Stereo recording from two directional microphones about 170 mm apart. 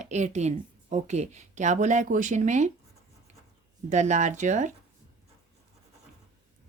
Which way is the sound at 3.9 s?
45° right (ahead or behind).